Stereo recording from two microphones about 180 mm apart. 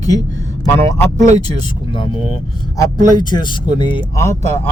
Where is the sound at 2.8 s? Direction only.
25° left (ahead or behind).